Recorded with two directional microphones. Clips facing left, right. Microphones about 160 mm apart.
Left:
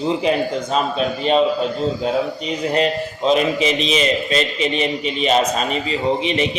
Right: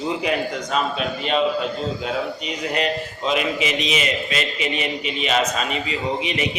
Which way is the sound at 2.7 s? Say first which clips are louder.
Left 4 dB; 35° left (ahead or behind).